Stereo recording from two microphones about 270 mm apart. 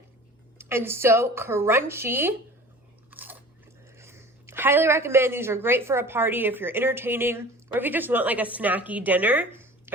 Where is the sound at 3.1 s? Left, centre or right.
Centre.